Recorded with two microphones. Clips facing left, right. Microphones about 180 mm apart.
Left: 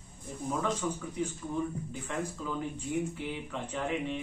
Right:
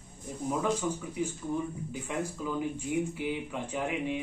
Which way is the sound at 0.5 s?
10° right (ahead or behind).